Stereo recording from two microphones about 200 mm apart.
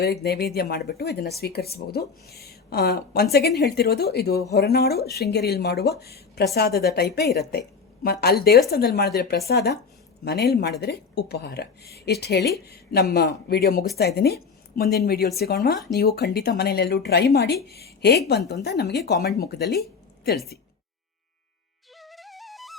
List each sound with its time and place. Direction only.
0.0 s a woman's voice: 55° left (ahead or behind)
22.0 s music: centre (ahead or behind)